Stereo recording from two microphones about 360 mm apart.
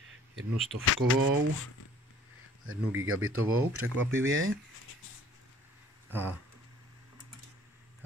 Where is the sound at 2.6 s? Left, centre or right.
Right.